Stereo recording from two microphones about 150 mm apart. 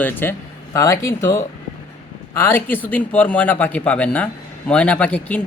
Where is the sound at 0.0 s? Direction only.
15° left (ahead or behind).